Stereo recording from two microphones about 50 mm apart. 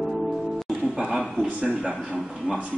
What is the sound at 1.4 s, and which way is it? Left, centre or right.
A man's voice, right.